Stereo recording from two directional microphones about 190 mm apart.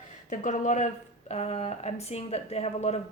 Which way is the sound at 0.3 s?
40° left (ahead or behind).